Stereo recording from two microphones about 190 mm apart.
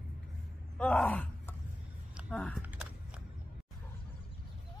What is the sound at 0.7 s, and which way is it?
Speech, 5° left (ahead or behind).